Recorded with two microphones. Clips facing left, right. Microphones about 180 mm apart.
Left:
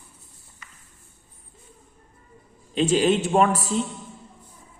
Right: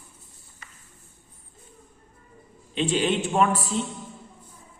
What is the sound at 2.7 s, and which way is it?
A man's voice, 40° left (ahead or behind).